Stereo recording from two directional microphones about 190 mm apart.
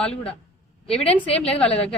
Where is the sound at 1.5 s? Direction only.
5° left (ahead or behind).